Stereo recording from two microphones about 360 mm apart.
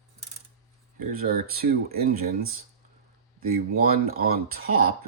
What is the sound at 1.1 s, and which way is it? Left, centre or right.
Speech, right.